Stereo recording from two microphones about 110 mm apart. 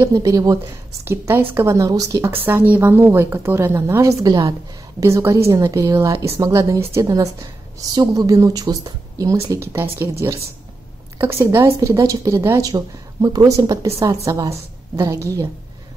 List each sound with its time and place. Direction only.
0.0 s a woman's voice: 30° right (ahead or behind)